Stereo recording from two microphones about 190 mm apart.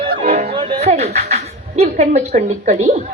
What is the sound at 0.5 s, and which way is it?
Speech, 25° right (ahead or behind).